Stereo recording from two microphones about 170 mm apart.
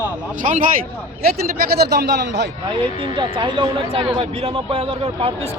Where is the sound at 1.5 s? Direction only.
65° right (ahead or behind); by 2.5 s 80° right.